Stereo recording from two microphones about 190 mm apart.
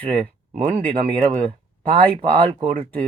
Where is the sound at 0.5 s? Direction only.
30° right (ahead or behind).